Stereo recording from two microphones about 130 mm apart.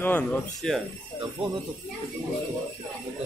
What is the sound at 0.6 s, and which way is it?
Speech, centre (ahead or behind).